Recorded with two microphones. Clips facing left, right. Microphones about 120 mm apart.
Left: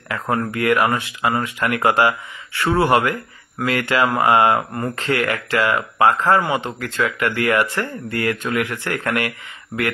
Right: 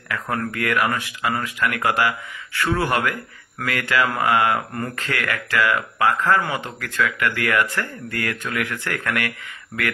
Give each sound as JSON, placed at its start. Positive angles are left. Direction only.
{"t": 0.1, "sound": "speech", "side_deg": 20}